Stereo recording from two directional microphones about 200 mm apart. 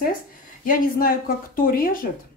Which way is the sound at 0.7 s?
45° left (ahead or behind).